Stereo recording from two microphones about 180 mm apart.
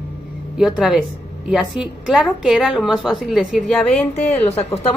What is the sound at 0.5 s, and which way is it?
Speech, centre (ahead or behind).